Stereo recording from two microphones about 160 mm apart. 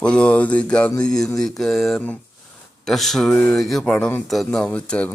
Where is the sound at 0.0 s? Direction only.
5° left (ahead or behind).